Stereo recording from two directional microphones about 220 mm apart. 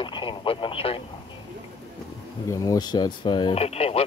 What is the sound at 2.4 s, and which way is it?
Speech, 15° left (ahead or behind).